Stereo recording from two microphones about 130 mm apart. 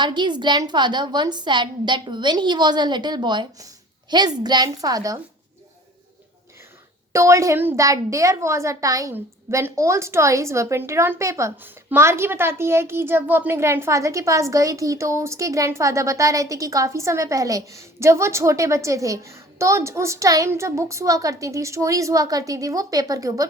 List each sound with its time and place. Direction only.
0.0 s a woman's voice: 35° right (ahead or behind)
7.1 s a child's voice: 25° right (ahead or behind)